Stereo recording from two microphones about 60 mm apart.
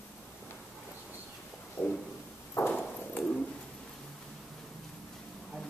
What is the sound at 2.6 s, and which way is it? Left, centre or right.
Ping, left.